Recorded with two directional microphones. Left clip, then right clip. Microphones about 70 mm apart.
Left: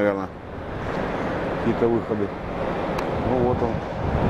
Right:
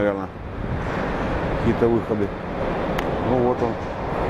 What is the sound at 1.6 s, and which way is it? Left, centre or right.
Speech, centre.